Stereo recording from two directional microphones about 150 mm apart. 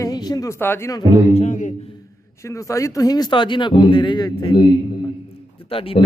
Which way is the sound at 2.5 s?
20° left (ahead or behind).